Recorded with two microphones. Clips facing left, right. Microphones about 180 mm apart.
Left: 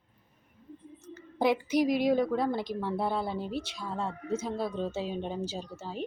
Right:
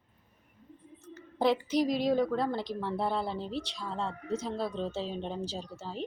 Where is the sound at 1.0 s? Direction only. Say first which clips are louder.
Even; 15° left (ahead or behind).